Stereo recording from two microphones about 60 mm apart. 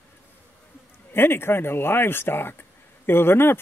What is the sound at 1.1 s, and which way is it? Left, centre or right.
Speech, left.